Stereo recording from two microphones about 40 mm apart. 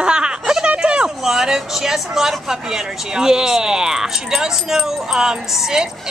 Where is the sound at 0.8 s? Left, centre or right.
Right.